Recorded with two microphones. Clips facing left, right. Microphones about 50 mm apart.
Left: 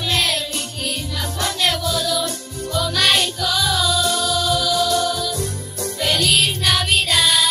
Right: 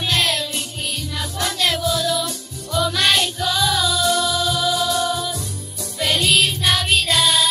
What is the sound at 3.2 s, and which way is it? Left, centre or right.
Music, centre.